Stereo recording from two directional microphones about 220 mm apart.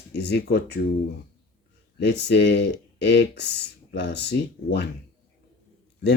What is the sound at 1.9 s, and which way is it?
Speech, 50° left (ahead or behind).